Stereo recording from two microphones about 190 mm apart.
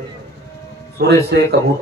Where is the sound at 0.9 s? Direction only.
60° right (ahead or behind).